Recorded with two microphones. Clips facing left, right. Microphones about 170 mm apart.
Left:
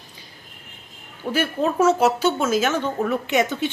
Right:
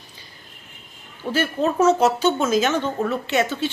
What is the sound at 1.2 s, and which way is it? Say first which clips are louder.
Speech: even; 5° left (ahead or behind).